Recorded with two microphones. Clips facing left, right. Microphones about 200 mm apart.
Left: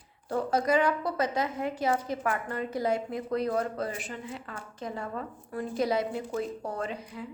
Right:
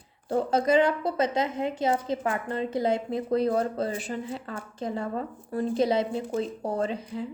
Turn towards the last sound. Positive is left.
turn(degrees=-30)  # may be behind; listen again after turning